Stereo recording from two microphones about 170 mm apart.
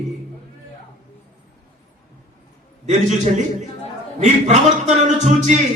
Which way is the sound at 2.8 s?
45° right (ahead or behind).